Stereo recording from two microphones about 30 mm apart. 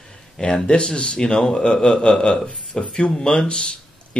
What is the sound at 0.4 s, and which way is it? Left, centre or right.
A man's voice, left.